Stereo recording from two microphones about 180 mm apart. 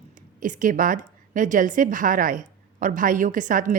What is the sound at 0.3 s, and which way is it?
A woman's voice, 45° right (ahead or behind).